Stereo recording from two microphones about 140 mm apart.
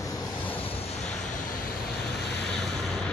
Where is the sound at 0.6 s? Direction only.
50° left (ahead or behind).